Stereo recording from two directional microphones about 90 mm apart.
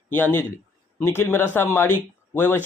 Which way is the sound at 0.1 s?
20° left (ahead or behind).